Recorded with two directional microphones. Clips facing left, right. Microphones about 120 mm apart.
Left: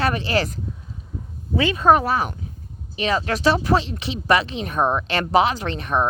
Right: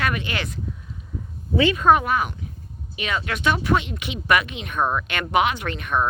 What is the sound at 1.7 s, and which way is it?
Speech, 35° left (ahead or behind).